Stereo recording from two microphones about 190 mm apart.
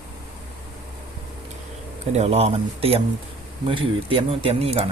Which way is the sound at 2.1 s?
30° right (ahead or behind).